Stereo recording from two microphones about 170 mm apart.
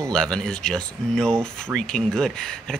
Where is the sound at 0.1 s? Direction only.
5° left (ahead or behind).